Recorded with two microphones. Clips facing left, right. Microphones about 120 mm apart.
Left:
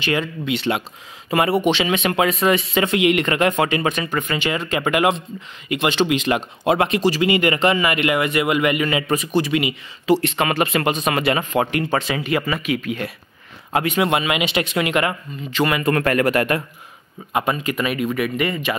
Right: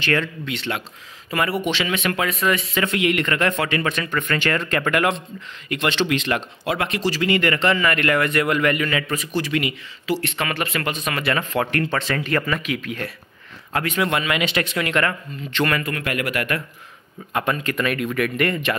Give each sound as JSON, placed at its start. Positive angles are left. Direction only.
{"t": 0.0, "sound": "speech", "side_deg": 15}
{"t": 13.7, "sound": "speech", "side_deg": 20}
{"t": 15.9, "sound": "speech", "side_deg": 40}
{"t": 17.3, "sound": "speech", "side_deg": 10}